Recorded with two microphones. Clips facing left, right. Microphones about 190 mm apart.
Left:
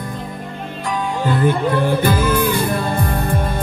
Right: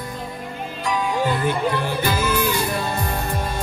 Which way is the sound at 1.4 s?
50° left (ahead or behind).